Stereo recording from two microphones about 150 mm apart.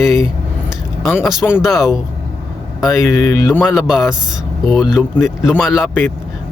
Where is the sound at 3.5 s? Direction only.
5° right (ahead or behind).